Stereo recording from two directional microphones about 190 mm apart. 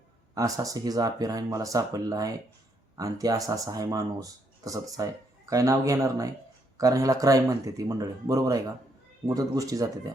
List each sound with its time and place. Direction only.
0.3 s speech: 20° right (ahead or behind)